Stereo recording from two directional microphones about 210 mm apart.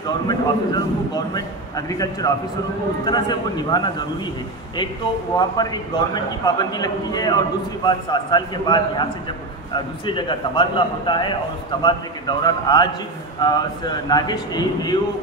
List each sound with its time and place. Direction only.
0.3 s a man's voice: 20° left (ahead or behind)
5.4 s a man's voice: 20° left (ahead or behind)
10.0 s a man's voice: 25° left (ahead or behind)